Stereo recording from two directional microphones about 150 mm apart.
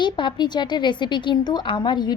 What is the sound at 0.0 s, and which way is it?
A woman's voice, 30° left (ahead or behind).